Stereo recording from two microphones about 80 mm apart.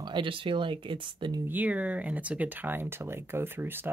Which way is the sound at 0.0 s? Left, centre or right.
Right.